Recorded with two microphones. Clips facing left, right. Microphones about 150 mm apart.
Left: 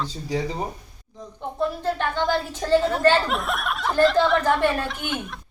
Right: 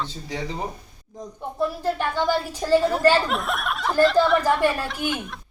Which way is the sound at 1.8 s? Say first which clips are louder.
Even; 10° right (ahead or behind).